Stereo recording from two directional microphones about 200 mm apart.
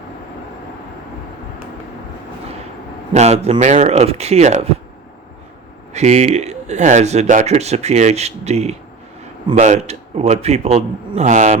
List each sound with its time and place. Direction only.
3.1 s speech: 35° right (ahead or behind)
5.9 s speech: 35° right (ahead or behind)